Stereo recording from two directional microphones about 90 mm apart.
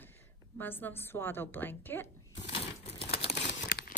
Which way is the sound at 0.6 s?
20° left (ahead or behind).